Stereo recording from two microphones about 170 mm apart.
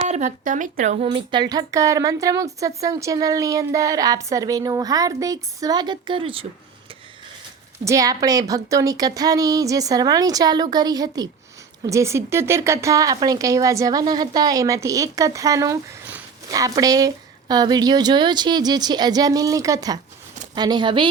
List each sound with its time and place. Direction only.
0.0 s speech: 45° right (ahead or behind)
1.0 s speech: 25° right (ahead or behind)
7.9 s speech: 20° right (ahead or behind)